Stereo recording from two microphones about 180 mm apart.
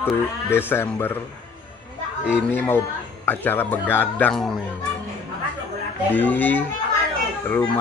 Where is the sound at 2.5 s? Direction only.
10° left (ahead or behind).